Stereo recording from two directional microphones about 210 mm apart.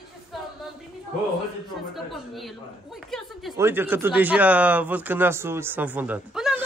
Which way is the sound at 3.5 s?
10° right (ahead or behind).